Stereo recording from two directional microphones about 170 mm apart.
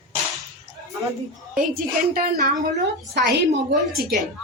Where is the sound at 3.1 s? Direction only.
90° right.